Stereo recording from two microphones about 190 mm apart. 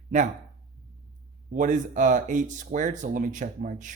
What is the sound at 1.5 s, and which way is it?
Speech, 40° right (ahead or behind).